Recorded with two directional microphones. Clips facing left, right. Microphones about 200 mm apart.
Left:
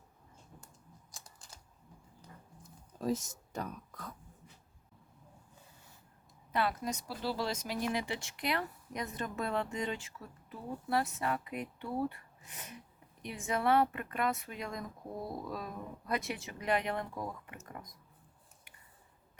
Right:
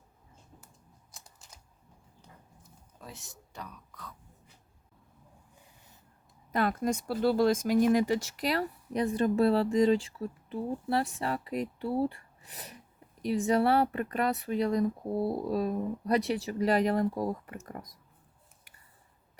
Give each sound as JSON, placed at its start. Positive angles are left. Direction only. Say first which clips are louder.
{"t": 3.0, "sound": "speech", "louder": "left 15 dB", "side_deg": 40}
{"t": 6.5, "sound": "speech", "louder": "right 5 dB", "side_deg": -45}